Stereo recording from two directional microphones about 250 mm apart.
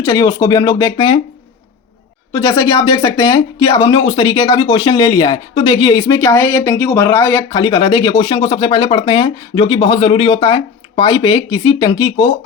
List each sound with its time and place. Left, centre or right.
0.0 s speech: centre
2.3 s speech: centre